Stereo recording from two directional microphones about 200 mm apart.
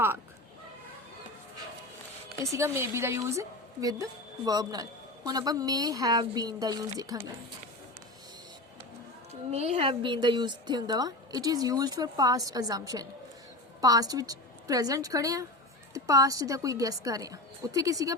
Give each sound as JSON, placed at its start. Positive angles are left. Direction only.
{"t": 2.4, "sound": "a woman's voice", "side_deg": -15}
{"t": 9.3, "sound": "a woman's voice", "side_deg": -30}